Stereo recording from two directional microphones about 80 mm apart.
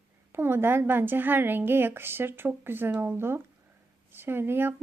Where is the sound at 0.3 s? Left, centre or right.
Right.